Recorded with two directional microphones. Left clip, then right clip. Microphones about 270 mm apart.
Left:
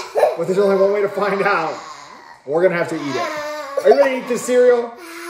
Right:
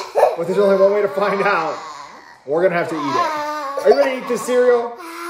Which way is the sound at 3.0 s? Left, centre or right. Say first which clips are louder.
Right 4 dB; centre.